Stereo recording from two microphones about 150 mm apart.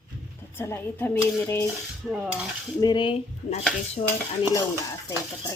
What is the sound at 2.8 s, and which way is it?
Speech, 30° left (ahead or behind).